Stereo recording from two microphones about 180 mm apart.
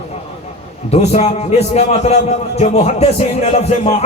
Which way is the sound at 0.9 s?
35° left (ahead or behind).